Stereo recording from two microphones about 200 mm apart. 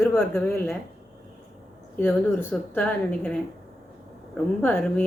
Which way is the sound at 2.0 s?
10° left (ahead or behind).